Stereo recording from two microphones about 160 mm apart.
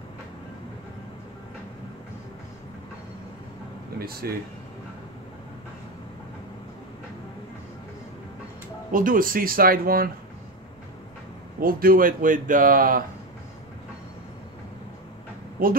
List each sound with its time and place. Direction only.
4.0 s speech: 70° right (ahead or behind)
8.9 s speech: 60° right (ahead or behind)
11.6 s speech: 65° right (ahead or behind)
15.6 s speech: 65° right (ahead or behind)